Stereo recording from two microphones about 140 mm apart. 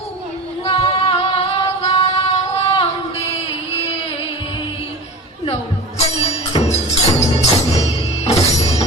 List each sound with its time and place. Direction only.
0.6 s female singing: 45° left (ahead or behind)
6.0 s music: 45° left (ahead or behind)